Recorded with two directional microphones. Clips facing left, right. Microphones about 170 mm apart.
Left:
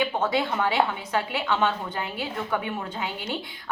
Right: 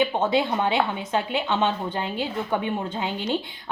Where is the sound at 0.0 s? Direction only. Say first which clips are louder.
Right 3 dB; 25° right (ahead or behind).